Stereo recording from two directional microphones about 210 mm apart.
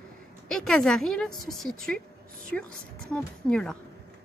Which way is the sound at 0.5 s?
5° left (ahead or behind).